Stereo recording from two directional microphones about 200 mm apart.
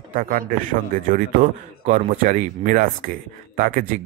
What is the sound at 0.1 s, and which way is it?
Speech, 45° right (ahead or behind).